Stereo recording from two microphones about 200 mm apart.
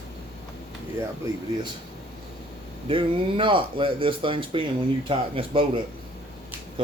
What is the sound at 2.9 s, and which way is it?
Speech, 25° right (ahead or behind).